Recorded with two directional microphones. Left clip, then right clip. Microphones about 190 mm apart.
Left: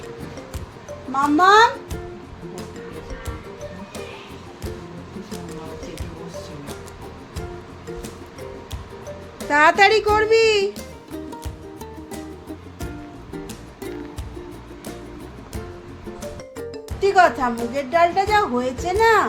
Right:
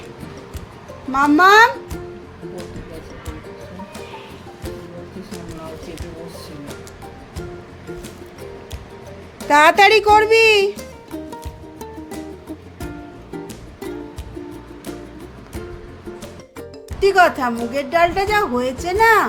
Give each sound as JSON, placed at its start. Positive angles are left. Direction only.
{"t": 1.1, "sound": "speech", "side_deg": -25}
{"t": 9.5, "sound": "a child's voice", "side_deg": -15}
{"t": 10.8, "sound": "music", "side_deg": 0}
{"t": 13.3, "sound": "music", "side_deg": 0}
{"t": 17.0, "sound": "a child's voice", "side_deg": -15}